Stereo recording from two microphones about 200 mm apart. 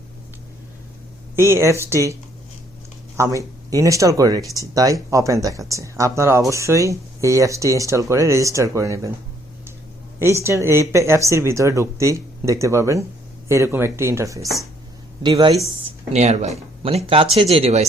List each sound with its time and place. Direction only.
1.4 s speech: 15° right (ahead or behind)
3.2 s speech: 15° right (ahead or behind)
10.4 s speech: 15° right (ahead or behind)
15.8 s speech: 35° right (ahead or behind)